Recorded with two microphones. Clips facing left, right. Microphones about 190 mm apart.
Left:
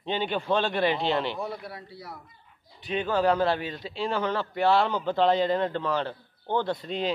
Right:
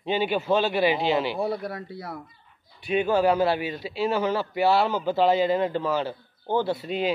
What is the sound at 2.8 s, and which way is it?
A man's voice, 10° right (ahead or behind).